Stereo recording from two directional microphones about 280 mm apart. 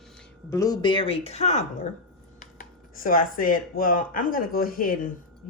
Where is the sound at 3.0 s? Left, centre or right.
Left.